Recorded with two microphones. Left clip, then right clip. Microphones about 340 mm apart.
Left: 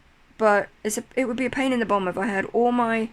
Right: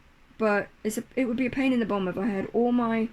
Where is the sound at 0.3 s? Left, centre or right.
Centre.